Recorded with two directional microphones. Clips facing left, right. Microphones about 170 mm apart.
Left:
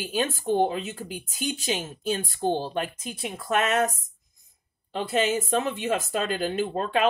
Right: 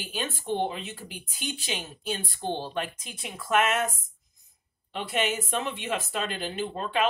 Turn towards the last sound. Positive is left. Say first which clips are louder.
# left 4 dB
turn(degrees=45)  # may be behind; listen again after turning